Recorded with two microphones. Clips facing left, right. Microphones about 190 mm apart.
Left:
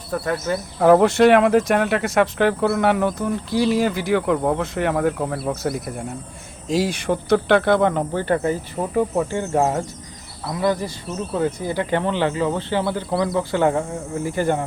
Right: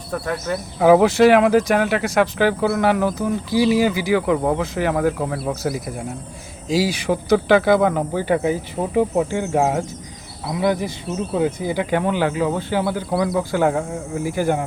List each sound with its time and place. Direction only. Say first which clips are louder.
0.1 s speech: left 1 dB; centre (ahead or behind)
9.6 s speech: even; centre (ahead or behind)
10.5 s speech: right 2 dB; 20° right (ahead or behind)
11.0 s speech: right 2 dB; centre (ahead or behind)
11.6 s speech: right 1 dB; 10° right (ahead or behind)
14.3 s speech: right 1 dB; 15° right (ahead or behind)